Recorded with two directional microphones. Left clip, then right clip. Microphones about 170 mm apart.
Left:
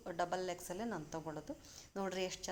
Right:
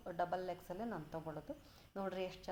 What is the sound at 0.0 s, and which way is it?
A woman's voice, 30° left (ahead or behind).